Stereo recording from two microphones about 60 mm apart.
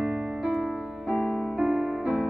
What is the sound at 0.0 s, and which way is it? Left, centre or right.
Music, centre.